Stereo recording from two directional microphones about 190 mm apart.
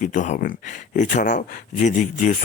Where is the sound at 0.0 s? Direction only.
45° left (ahead or behind).